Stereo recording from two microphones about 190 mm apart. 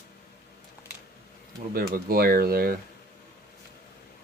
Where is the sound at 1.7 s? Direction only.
50° right (ahead or behind).